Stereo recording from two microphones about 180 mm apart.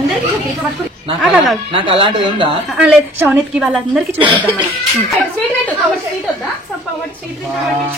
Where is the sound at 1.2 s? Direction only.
Centre (ahead or behind).